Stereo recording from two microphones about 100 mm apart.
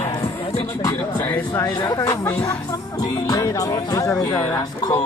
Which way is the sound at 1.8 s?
35° left (ahead or behind).